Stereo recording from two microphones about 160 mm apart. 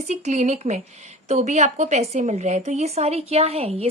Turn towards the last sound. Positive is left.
turn(degrees=-40)  # may be behind; listen again after turning